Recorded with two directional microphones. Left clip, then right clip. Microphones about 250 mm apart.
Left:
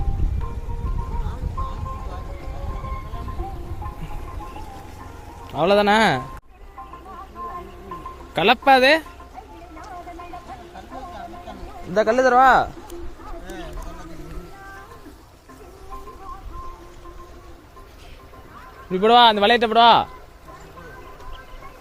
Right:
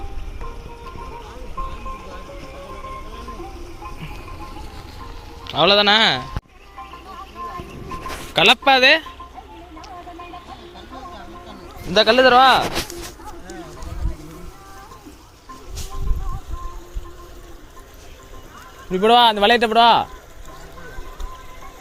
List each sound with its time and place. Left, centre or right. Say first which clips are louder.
5.5 s speech: right 3 dB; centre
8.3 s a man's voice: right 2 dB; centre
12.0 s speech: right 4 dB; centre
12.3 s speech: right 2 dB; centre
18.9 s a man's voice: even; centre